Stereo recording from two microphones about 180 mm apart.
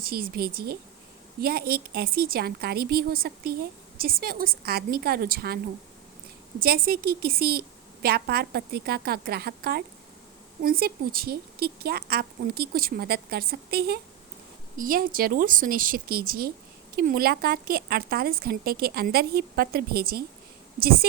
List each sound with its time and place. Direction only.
0.0 s a woman's voice: 55° right (ahead or behind)
6.6 s a woman's voice: 55° right (ahead or behind)